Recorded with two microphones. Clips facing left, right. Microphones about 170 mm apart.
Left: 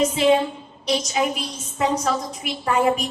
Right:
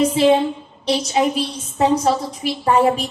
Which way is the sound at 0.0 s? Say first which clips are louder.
Right 3 dB; 30° right (ahead or behind).